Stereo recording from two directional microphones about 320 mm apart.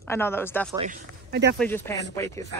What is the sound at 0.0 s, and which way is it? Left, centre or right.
Speech, centre.